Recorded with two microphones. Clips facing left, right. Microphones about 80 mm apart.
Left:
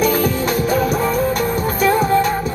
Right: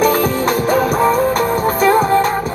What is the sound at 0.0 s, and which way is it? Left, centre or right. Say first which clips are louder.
Music: right 3 dB; right.